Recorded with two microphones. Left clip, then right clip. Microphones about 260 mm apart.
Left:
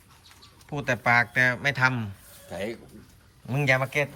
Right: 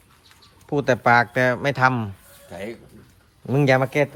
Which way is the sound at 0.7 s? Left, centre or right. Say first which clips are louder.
Right 6 dB; centre.